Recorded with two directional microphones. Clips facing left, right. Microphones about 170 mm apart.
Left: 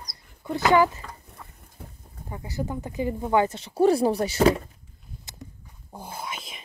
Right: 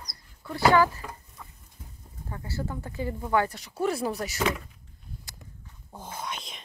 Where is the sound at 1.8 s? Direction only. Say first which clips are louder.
Left 6 dB; 65° left (ahead or behind).